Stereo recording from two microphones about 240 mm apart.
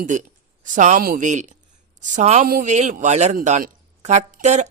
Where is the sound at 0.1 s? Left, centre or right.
Right.